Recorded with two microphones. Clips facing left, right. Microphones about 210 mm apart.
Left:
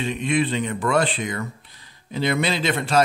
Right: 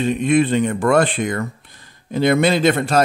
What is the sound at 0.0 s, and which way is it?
A man's voice, 45° right (ahead or behind).